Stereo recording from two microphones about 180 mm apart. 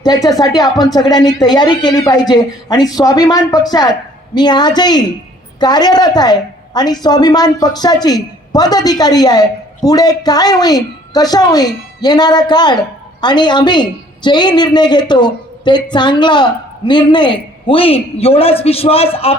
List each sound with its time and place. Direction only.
0.0 s speech: 20° left (ahead or behind)